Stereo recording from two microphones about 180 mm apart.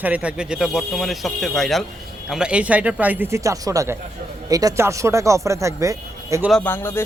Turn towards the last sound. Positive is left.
turn(degrees=15)  # may be behind; listen again after turning